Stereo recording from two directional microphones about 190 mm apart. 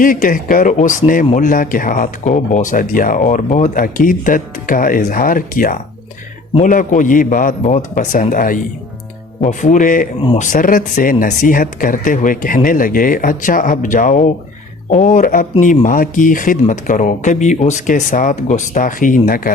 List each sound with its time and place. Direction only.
0.0 s speech: 45° left (ahead or behind)
14.8 s speech: 30° left (ahead or behind)
15.1 s speech: 40° left (ahead or behind)